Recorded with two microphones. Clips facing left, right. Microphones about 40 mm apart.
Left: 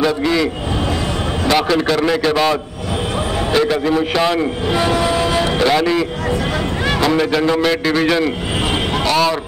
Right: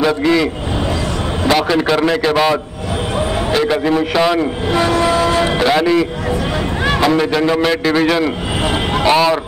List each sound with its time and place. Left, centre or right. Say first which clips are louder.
0.0 s a man's voice: right 2 dB; centre
1.5 s a man's voice: right 1 dB; centre
5.4 s a man's voice: right 1 dB; centre
9.0 s a man's voice: right 4 dB; centre